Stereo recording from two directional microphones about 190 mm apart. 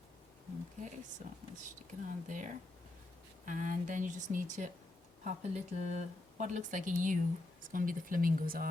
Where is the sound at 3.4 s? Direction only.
45° right (ahead or behind).